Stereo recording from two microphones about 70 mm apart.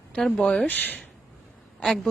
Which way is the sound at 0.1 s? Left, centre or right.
Centre.